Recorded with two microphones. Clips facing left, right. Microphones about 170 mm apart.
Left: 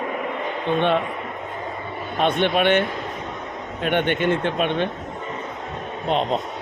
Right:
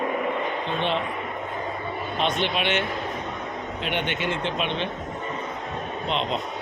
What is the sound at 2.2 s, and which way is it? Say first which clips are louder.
Speech: left 7 dB; 55° left (ahead or behind).